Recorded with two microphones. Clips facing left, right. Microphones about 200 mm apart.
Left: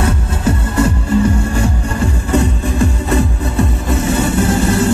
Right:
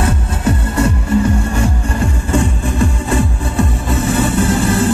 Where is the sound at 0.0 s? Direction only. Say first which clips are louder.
Even; 30° left (ahead or behind).